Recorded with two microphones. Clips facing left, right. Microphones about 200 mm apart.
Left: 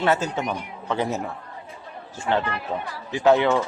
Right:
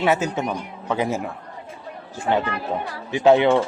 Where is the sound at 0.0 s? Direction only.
15° right (ahead or behind).